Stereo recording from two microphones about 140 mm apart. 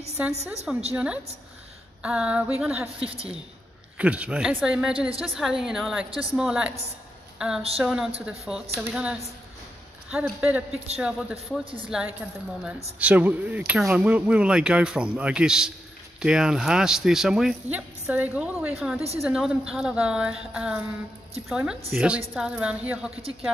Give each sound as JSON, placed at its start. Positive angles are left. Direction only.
{"t": 0.2, "sound": "speech", "side_deg": -10}
{"t": 4.0, "sound": "speech", "side_deg": -10}
{"t": 6.0, "sound": "speech", "side_deg": -40}
{"t": 6.3, "sound": "a woman's voice", "side_deg": -5}